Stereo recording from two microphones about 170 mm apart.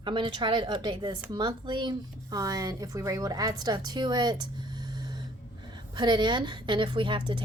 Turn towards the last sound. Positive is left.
turn(degrees=-30)  # may be behind; listen again after turning